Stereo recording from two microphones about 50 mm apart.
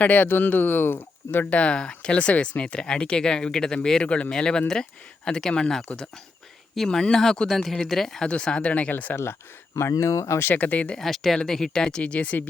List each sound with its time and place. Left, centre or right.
0.0 s speech: left
1.5 s speech: left; by 8.3 s centre
8.3 s speech: centre; by 9.1 s left
9.7 s speech: left
10.5 s speech: left
10.9 s speech: centre; by 12.5 s left